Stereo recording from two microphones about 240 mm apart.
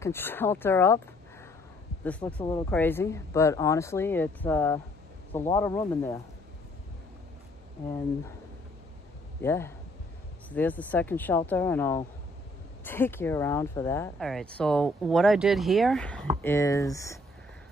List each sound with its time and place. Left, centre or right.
0.0 s speech: centre
2.0 s speech: centre
9.4 s speech: centre